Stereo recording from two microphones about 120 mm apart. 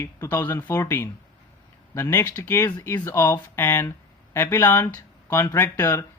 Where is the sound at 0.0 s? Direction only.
20° left (ahead or behind).